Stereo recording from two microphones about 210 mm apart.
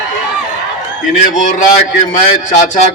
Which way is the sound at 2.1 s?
35° left (ahead or behind).